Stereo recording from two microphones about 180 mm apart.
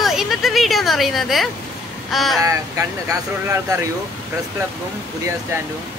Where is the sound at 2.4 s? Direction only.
15° right (ahead or behind).